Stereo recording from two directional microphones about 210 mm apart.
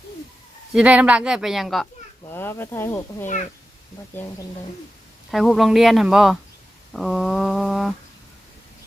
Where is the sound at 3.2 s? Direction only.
35° left (ahead or behind).